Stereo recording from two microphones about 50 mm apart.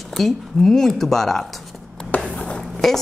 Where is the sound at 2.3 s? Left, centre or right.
Left.